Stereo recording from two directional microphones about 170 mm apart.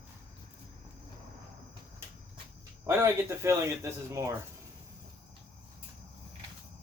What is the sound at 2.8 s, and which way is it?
Speech, 15° right (ahead or behind).